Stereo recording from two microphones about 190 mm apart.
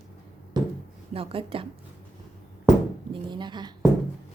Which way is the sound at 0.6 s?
20° right (ahead or behind).